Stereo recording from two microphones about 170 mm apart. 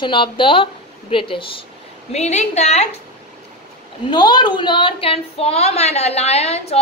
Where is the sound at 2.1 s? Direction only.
40° left (ahead or behind).